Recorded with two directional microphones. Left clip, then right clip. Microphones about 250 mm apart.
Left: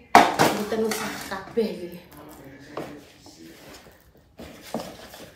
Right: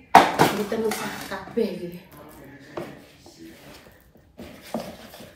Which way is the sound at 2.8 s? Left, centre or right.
Centre.